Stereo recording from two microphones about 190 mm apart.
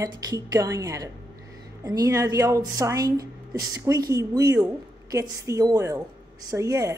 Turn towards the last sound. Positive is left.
turn(degrees=-15)  # may be behind; listen again after turning